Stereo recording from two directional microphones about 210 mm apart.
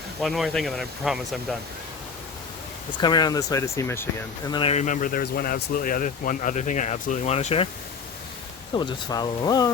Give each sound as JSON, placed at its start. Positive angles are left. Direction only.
{"t": 0.2, "sound": "speech", "side_deg": 0}
{"t": 3.0, "sound": "speech", "side_deg": 20}
{"t": 8.7, "sound": "speech", "side_deg": 20}